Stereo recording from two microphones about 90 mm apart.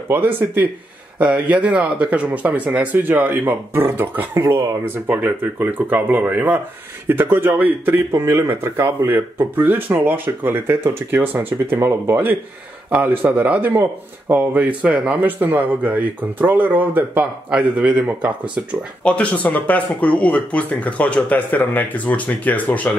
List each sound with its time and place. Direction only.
0.1 s speech: 20° right (ahead or behind)
19.0 s speech: 15° left (ahead or behind)